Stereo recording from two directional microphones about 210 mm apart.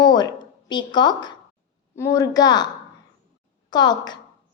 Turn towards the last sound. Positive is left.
turn(degrees=20)  # may be behind; listen again after turning